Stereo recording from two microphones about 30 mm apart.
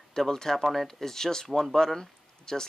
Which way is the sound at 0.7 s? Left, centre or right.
Centre.